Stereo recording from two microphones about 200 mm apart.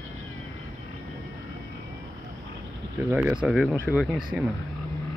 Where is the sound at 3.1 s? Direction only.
5° right (ahead or behind).